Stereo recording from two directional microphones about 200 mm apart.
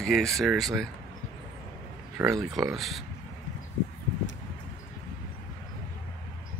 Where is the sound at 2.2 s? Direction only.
Centre (ahead or behind).